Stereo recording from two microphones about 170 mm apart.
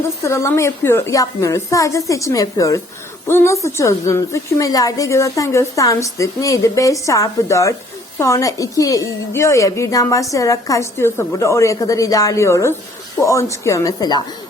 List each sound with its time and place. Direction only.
0.2 s a woman's voice: 15° left (ahead or behind)